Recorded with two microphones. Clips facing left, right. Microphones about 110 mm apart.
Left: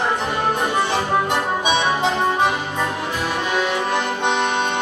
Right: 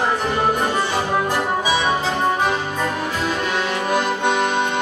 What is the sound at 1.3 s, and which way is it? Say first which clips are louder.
Music: even; 20° left (ahead or behind).